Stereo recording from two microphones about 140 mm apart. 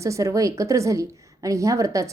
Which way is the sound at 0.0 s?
20° right (ahead or behind).